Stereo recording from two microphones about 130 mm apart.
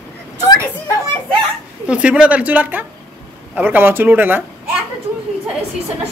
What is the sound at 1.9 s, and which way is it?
A man's voice, 10° right (ahead or behind).